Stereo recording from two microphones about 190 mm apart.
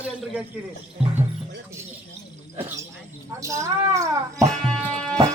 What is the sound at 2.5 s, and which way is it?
Speech, 20° right (ahead or behind).